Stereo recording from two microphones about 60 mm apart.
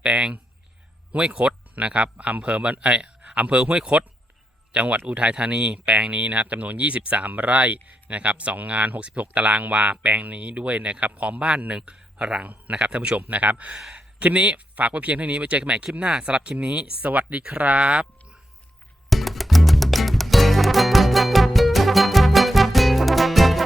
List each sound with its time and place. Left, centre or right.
0.0 s speech: centre
13.7 s speech: centre
14.2 s speech: right
19.1 s music: centre